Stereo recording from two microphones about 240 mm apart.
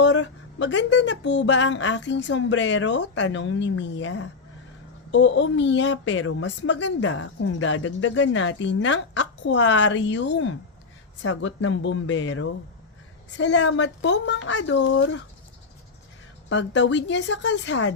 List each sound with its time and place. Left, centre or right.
0.0 s a woman's voice: left
16.5 s a woman's voice: left